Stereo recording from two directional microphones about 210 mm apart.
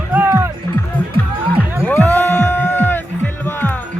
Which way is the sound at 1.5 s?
10° right (ahead or behind).